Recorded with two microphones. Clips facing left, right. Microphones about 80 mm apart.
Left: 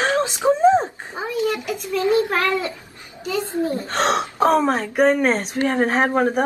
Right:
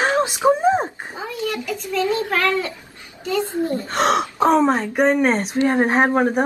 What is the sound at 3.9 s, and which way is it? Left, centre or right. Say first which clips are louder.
Speech: right 2 dB; left.